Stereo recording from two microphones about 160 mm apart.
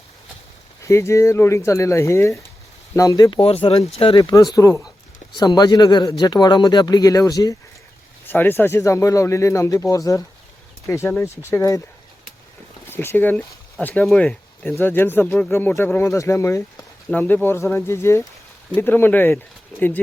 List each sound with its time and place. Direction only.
0.8 s speech: 15° left (ahead or behind); by 4.2 s 35° left (ahead or behind)
4.2 s speech: 25° left (ahead or behind)
12.9 s speech: 15° left (ahead or behind)